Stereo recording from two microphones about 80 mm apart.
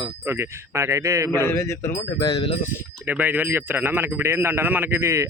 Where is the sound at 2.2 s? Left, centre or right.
Left.